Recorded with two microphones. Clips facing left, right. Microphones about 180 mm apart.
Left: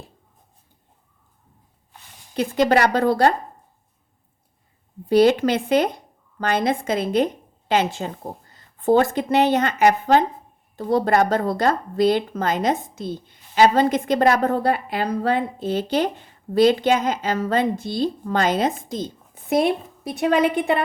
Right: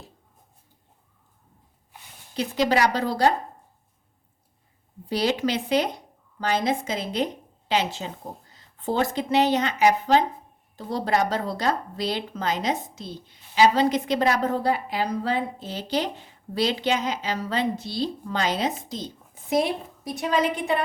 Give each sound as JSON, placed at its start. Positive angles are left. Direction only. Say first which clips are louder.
{"t": 2.3, "sound": "a woman's voice", "louder": "left 5 dB", "side_deg": 55}
{"t": 5.0, "sound": "a woman's voice", "louder": "left 8 dB", "side_deg": 55}